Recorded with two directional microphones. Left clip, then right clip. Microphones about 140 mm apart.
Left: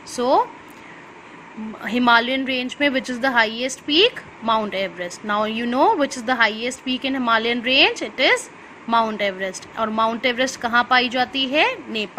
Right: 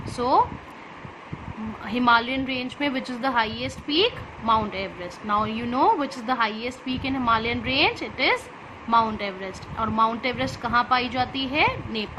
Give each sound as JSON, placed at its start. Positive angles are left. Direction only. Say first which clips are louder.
{"t": 0.2, "sound": "a woman's voice", "louder": "left 3 dB", "side_deg": 35}
{"t": 1.8, "sound": "a woman's voice", "louder": "left 4 dB", "side_deg": 40}